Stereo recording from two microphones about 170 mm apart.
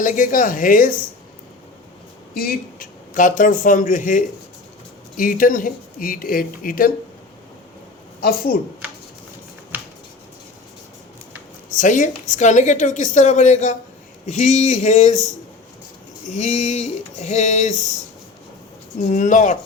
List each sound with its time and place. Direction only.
0.0 s a woman's voice: 50° left (ahead or behind)
2.3 s speech: 60° left (ahead or behind)
8.2 s speech: 65° left (ahead or behind)
11.7 s a woman's voice: 50° left (ahead or behind)
16.3 s a woman's voice: 45° left (ahead or behind)
19.0 s a woman's voice: 45° left (ahead or behind)